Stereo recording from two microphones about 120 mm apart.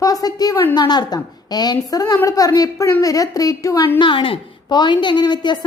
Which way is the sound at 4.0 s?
45° left (ahead or behind).